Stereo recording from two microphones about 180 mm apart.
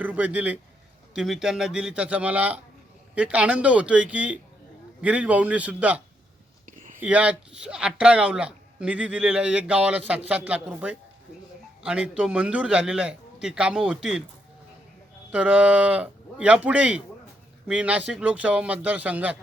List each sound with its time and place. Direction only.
0.0 s a man's voice: 10° right (ahead or behind)
6.7 s a sound: 45° right (ahead or behind)
7.0 s a man's voice: 5° right (ahead or behind)
15.3 s speech: 5° right (ahead or behind)